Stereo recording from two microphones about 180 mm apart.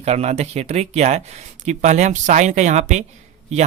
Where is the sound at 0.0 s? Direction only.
35° right (ahead or behind).